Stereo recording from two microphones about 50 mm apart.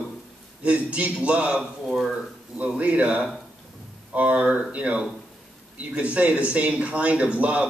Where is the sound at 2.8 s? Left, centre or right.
Right.